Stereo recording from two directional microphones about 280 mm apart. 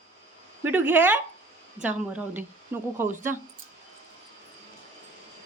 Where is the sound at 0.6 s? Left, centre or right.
Centre.